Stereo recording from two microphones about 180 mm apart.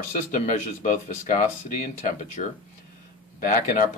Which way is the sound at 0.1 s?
45° left (ahead or behind).